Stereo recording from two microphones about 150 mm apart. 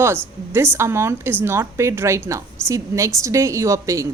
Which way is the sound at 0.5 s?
15° right (ahead or behind).